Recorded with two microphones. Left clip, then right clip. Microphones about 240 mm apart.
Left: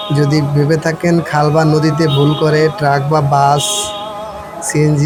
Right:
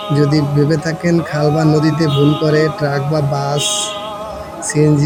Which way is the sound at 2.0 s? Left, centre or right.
Centre.